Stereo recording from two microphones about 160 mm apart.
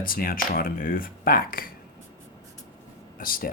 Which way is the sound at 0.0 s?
65° left (ahead or behind).